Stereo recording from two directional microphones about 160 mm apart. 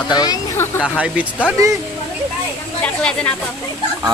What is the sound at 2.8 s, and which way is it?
Speech, 5° left (ahead or behind).